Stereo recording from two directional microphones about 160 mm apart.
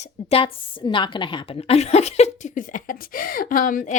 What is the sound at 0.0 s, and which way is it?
A woman's voice, 40° left (ahead or behind).